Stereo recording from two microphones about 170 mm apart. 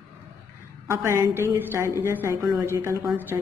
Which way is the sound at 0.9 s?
15° right (ahead or behind).